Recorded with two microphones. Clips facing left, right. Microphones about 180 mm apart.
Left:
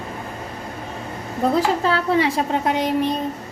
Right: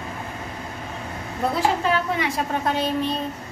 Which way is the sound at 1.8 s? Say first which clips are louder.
Left 4 dB; 35° left (ahead or behind).